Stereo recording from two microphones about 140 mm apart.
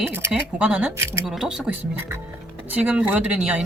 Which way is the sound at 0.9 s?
20° right (ahead or behind).